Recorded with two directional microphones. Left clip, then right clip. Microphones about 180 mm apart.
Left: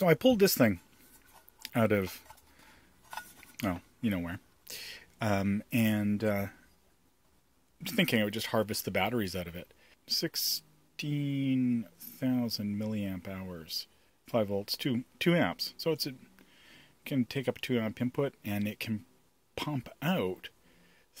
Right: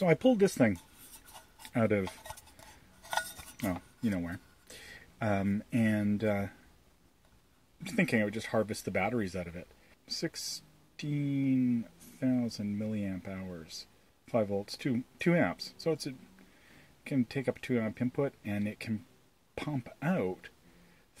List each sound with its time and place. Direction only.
0.0 s speech: 40° left (ahead or behind)
3.5 s speech: 35° left (ahead or behind)
7.9 s speech: 35° left (ahead or behind)
11.1 s speech: 35° left (ahead or behind)